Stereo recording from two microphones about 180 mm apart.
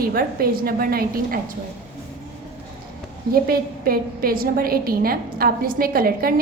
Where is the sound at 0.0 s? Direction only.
55° right (ahead or behind).